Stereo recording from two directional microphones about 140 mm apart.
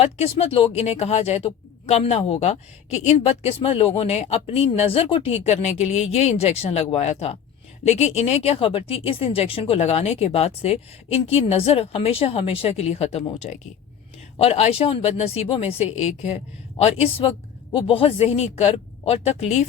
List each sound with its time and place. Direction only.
0.0 s speech: 45° left (ahead or behind)
13.4 s speech: 60° left (ahead or behind)
14.3 s speech: 50° left (ahead or behind)